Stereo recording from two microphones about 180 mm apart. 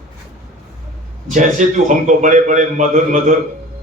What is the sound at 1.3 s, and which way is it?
A man's voice, 45° right (ahead or behind).